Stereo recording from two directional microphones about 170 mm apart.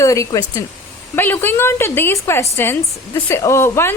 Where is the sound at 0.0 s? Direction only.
20° left (ahead or behind).